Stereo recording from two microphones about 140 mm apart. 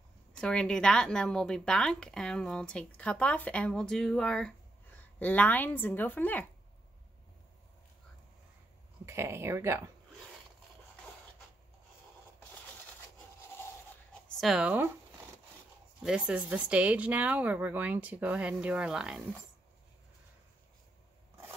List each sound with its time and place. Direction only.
0.4 s a woman's voice: 5° left (ahead or behind)
9.0 s speech: 20° right (ahead or behind)
14.4 s a woman's voice: 5° right (ahead or behind)
16.0 s a woman's voice: 5° right (ahead or behind)